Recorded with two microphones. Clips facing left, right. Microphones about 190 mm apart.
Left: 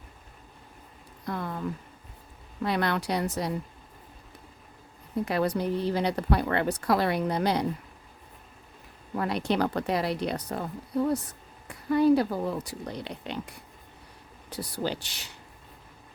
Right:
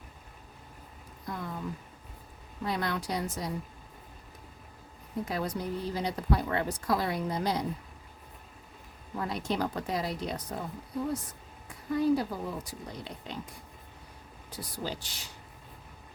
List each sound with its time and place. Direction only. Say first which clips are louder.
1.3 s a sound: left 5 dB; 65° left (ahead or behind)
2.6 s speech: left 5 dB; 70° left (ahead or behind)
5.2 s speech: left 7 dB; 70° left (ahead or behind)
9.1 s speech: left 5 dB; 70° left (ahead or behind)